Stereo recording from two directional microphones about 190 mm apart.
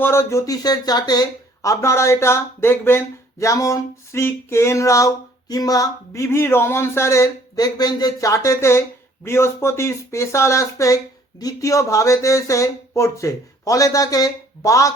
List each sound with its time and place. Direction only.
0.0 s speech: 15° left (ahead or behind)